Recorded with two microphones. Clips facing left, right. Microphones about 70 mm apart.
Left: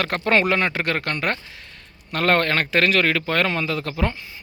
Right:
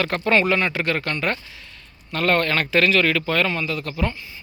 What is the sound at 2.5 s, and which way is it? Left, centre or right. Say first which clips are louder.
Speech: right 1 dB; left.